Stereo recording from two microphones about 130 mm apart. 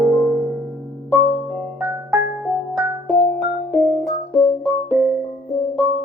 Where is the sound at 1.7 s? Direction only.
15° right (ahead or behind).